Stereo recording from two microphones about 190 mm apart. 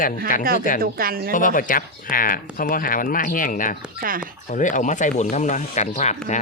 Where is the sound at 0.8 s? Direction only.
50° right (ahead or behind).